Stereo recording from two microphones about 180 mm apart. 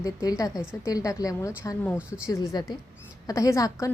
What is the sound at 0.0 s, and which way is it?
A woman's voice, 20° left (ahead or behind).